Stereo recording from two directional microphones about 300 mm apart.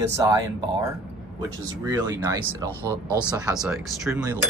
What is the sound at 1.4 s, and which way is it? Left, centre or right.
Speech, centre.